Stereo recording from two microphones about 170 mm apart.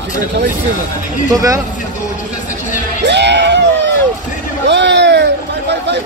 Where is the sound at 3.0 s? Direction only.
90° right.